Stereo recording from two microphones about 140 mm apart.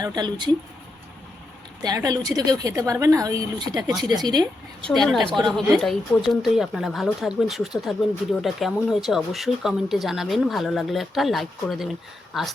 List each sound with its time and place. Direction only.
0.0 s speech: 30° right (ahead or behind)
2.0 s a woman's voice: 25° right (ahead or behind)
4.9 s speech: centre (ahead or behind)